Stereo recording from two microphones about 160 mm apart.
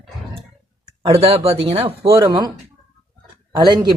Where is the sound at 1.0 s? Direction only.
40° right (ahead or behind).